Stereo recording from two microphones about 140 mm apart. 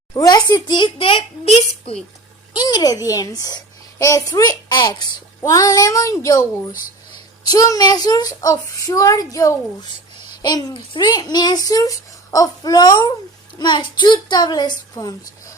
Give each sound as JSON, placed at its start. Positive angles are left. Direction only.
{"t": 0.1, "sound": "a woman's voice", "side_deg": 25}
{"t": 2.6, "sound": "a child's voice", "side_deg": 30}